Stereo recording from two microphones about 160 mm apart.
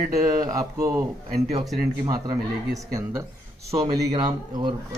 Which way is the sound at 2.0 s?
20° right (ahead or behind).